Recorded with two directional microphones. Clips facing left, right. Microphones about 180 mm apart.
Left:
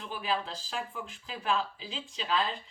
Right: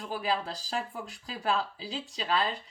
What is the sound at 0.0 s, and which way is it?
Speech, 40° right (ahead or behind).